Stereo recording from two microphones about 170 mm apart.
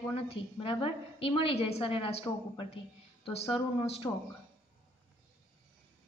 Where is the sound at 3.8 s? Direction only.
35° left (ahead or behind).